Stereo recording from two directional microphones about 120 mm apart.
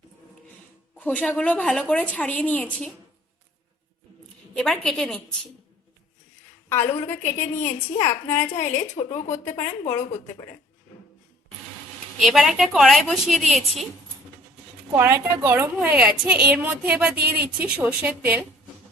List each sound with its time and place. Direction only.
0.9 s a woman's voice: 10° left (ahead or behind)
4.5 s a woman's voice: 5° left (ahead or behind)
6.7 s a woman's voice: 20° left (ahead or behind)
9.0 s a woman's voice: 65° left (ahead or behind)
9.6 s a woman's voice: 25° left (ahead or behind)
12.2 s a woman's voice: centre (ahead or behind)
14.9 s a woman's voice: 20° right (ahead or behind)